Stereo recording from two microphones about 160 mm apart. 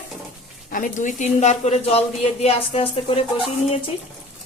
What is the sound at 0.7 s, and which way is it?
A woman's voice, 55° left (ahead or behind).